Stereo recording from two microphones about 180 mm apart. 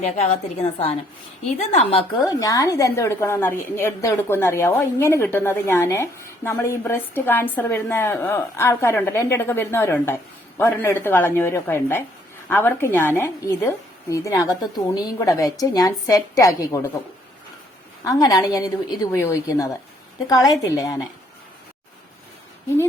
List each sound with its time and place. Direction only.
0.0 s a woman's voice: 35° left (ahead or behind)
2.2 s a woman's voice: 20° left (ahead or behind)
18.0 s a woman's voice: 20° left (ahead or behind)